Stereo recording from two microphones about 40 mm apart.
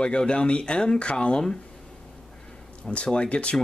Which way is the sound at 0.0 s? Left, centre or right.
Left.